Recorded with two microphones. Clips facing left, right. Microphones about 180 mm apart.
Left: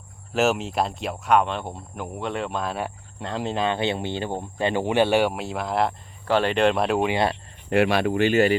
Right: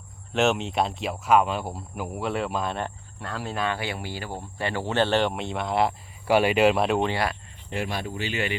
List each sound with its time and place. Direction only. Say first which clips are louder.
0.3 s speech: left 1 dB; centre (ahead or behind)
3.2 s speech: left 4 dB; 20° left (ahead or behind); by 5.9 s centre (ahead or behind)
6.2 s speech: right 1 dB; 10° right (ahead or behind)
7.1 s speech: left 4 dB; 25° left (ahead or behind)
7.7 s speech: left 10 dB; 75° left (ahead or behind)
8.3 s speech: left 10 dB; 45° left (ahead or behind)